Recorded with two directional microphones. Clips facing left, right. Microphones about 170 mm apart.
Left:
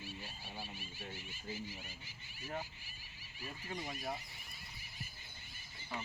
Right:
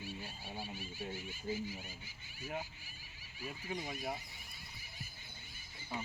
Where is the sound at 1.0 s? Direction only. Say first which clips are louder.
Right 6 dB; 15° right (ahead or behind).